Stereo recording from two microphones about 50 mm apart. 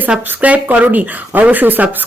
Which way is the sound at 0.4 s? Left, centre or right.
Right.